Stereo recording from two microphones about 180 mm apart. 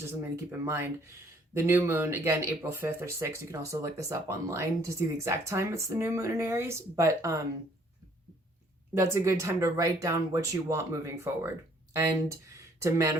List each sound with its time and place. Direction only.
0.0 s speech: 15° right (ahead or behind)
9.0 s speech: 15° right (ahead or behind)